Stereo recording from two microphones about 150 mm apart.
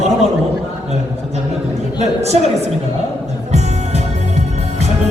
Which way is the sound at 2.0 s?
45° right (ahead or behind).